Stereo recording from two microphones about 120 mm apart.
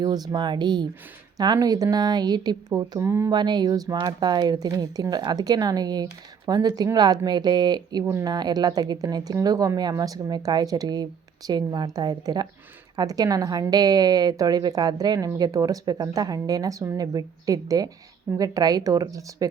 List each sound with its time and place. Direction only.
0.0 s a woman's voice: 35° right (ahead or behind)
3.3 s a woman's voice: 35° right (ahead or behind)